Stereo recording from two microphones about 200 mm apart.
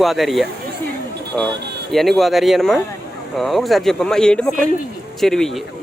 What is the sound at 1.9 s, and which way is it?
Speech, centre (ahead or behind).